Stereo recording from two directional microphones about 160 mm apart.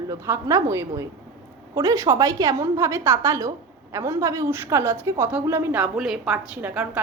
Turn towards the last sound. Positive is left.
turn(degrees=-10)  # may be behind; listen again after turning